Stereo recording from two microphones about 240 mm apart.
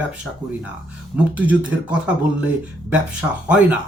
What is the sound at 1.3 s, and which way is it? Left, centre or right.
Speech, centre.